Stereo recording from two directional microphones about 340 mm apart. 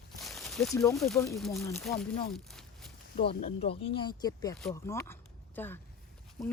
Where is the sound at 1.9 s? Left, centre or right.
Left.